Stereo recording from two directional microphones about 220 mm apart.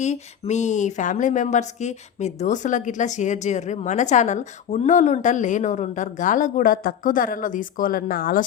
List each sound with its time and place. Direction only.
0.0 s speech: 30° left (ahead or behind)